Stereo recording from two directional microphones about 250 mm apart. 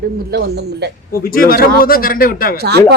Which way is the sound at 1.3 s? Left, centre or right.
Left.